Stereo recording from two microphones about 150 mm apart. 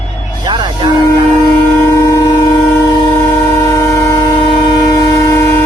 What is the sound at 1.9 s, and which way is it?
Train, 25° left (ahead or behind).